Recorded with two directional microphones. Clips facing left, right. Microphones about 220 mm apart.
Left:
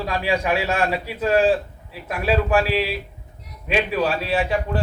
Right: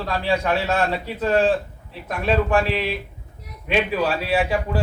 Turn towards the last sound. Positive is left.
turn(degrees=0)  # may be behind; listen again after turning